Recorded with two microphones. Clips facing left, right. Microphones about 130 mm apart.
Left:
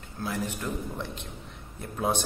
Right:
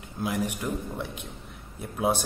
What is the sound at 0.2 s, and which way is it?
A man's voice, 15° right (ahead or behind).